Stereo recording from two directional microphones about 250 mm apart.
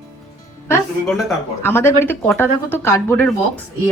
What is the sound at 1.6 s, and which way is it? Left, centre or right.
A woman's voice, centre.